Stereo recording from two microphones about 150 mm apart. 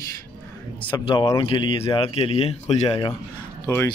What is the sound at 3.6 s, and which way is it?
Speech, 20° left (ahead or behind).